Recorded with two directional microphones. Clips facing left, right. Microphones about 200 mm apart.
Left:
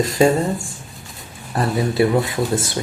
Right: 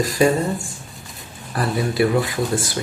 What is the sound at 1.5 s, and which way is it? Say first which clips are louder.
Speech: left 2 dB; 25° left (ahead or behind).